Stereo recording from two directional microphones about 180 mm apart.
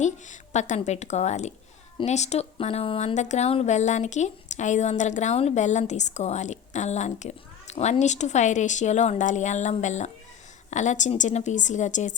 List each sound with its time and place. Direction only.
0.0 s a woman's voice: 40° left (ahead or behind)